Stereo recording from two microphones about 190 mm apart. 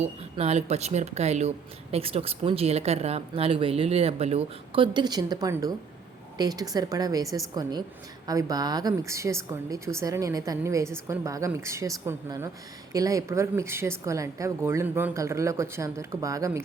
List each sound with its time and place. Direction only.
0.0 s a woman's voice: 35° right (ahead or behind); by 16.5 s 15° right (ahead or behind)